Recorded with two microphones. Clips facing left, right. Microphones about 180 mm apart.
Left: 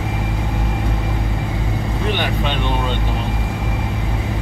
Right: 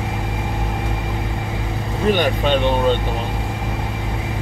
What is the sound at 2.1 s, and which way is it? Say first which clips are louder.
Speech: right 4 dB; 45° right (ahead or behind).